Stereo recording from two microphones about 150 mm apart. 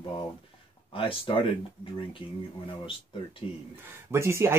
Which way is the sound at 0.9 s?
35° left (ahead or behind).